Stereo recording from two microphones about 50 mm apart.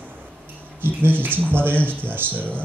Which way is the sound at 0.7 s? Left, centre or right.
Right.